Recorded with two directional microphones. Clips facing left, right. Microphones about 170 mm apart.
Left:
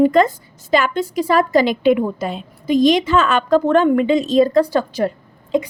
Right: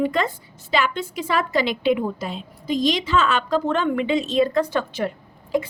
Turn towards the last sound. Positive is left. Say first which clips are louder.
# left 4 dB
turn(degrees=20)  # may be behind; listen again after turning